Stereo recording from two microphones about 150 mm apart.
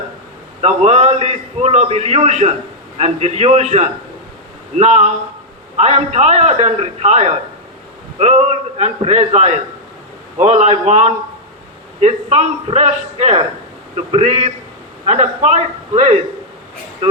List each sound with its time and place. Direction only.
0.6 s a man's voice: 45° right (ahead or behind)